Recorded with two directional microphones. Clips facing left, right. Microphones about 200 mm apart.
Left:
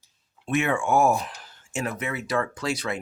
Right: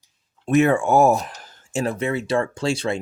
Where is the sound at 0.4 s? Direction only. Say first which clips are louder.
Right 7 dB; 40° right (ahead or behind).